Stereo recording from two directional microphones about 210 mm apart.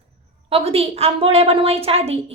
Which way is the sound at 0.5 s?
30° right (ahead or behind).